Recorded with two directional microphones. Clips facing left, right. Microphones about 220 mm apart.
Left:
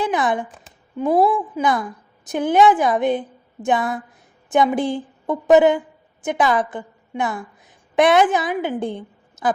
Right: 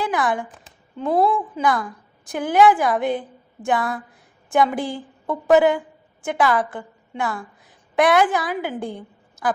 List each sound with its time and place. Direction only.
0.0 s speech: 20° left (ahead or behind)
1.1 s a woman's voice: 5° left (ahead or behind)
1.6 s a woman's voice: 20° left (ahead or behind)